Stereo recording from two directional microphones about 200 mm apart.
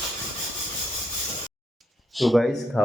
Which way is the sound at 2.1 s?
Centre (ahead or behind).